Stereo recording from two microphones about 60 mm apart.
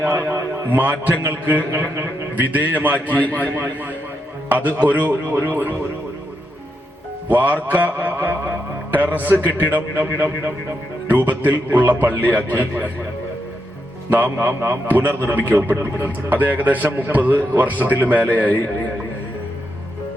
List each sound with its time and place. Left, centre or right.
0.0 s a man's voice: right
0.6 s a man's voice: right
7.3 s a man's voice: right
14.3 s a man's voice: right
14.8 s a man's voice: right